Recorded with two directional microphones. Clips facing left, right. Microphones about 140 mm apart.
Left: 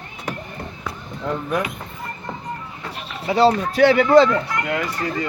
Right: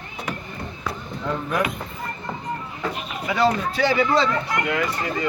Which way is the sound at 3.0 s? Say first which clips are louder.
Left 5 dB; 35° left (ahead or behind).